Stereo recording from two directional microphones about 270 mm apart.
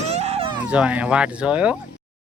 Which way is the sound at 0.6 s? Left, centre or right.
Centre.